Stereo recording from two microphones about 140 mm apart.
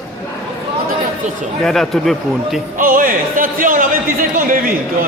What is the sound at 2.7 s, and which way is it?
Music, 75° right (ahead or behind).